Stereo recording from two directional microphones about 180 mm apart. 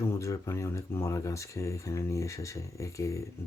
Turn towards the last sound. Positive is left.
turn(degrees=15)  # may be behind; listen again after turning